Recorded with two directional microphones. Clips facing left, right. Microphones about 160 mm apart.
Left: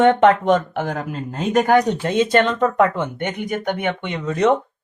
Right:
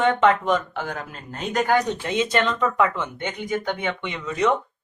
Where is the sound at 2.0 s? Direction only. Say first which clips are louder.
Left 5 dB; 50° left (ahead or behind).